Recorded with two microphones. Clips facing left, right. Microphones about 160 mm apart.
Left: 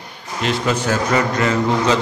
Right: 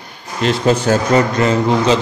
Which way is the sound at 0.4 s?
35° right (ahead or behind).